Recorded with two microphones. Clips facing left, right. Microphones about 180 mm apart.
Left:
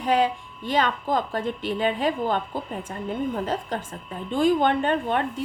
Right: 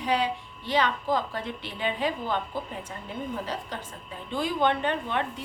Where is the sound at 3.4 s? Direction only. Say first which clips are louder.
Left 6 dB; 50° left (ahead or behind).